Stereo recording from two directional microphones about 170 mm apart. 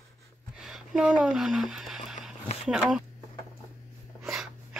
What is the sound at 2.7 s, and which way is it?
Speech, 5° right (ahead or behind).